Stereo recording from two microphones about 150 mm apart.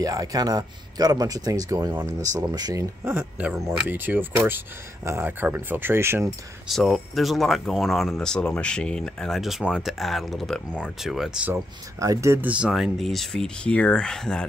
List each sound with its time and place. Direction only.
0.0 s speech: 25° right (ahead or behind)
6.7 s speech: centre (ahead or behind)
12.0 s speech: 20° right (ahead or behind); by 14.4 s 5° left (ahead or behind)